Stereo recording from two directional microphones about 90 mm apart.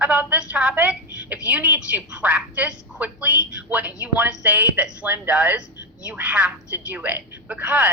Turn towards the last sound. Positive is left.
turn(degrees=-15)  # may be behind; listen again after turning